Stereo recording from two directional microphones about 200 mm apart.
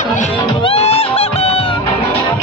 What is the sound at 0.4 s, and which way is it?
Music, 25° left (ahead or behind).